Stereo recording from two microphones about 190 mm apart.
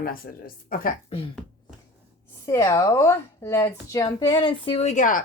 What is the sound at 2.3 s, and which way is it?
Speech, 15° left (ahead or behind).